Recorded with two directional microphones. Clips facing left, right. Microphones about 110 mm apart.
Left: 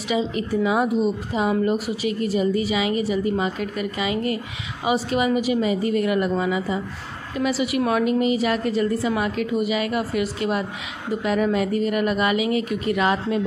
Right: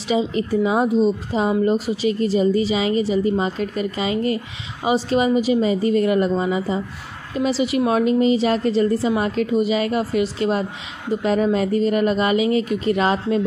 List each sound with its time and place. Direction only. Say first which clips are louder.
0.1 s speech: right 3 dB; 30° right (ahead or behind)